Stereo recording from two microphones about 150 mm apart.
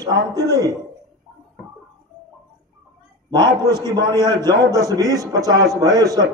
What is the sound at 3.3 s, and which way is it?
Speech, 30° right (ahead or behind).